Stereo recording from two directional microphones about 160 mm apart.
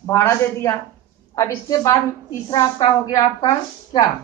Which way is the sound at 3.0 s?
25° left (ahead or behind).